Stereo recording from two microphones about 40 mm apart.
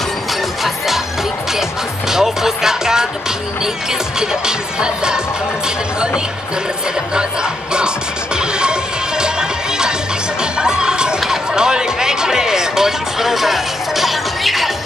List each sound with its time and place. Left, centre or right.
0.3 s music: centre
7.2 s music: right; by 14.7 s centre